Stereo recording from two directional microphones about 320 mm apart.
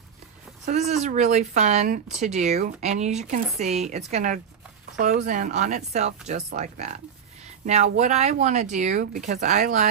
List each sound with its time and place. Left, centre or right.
0.7 s speech: right